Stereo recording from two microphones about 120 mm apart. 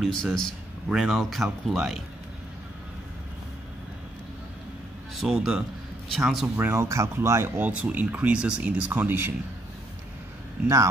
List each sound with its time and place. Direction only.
0.0 s speech: 5° left (ahead or behind)
5.2 s speech: centre (ahead or behind)
6.5 s speech: 20° right (ahead or behind)